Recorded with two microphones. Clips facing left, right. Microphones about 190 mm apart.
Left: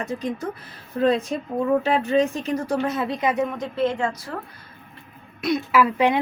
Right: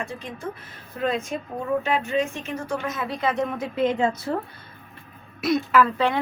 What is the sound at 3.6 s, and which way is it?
Speech, 15° right (ahead or behind).